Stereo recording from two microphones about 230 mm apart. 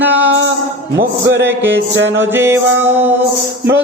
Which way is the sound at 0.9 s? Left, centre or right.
Right.